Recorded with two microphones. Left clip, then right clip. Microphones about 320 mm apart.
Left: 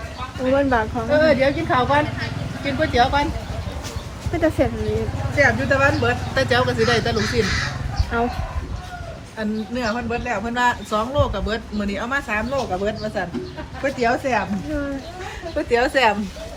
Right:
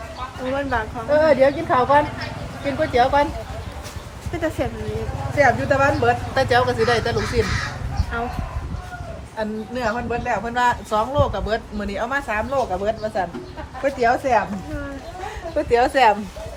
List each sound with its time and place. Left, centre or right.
0.5 s speech: centre
1.1 s speech: right
4.4 s speech: centre
5.4 s speech: right
8.1 s speech: centre
9.4 s speech: right